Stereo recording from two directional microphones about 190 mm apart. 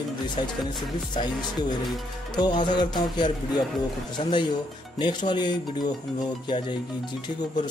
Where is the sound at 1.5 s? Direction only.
Centre (ahead or behind).